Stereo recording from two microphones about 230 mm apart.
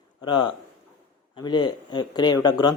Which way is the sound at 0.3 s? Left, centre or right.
Centre.